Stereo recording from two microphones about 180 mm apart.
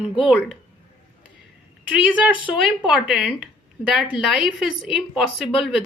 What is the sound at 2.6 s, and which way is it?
A woman's voice, 5° right (ahead or behind).